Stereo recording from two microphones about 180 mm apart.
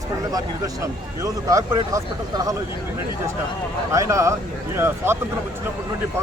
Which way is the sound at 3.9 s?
15° right (ahead or behind).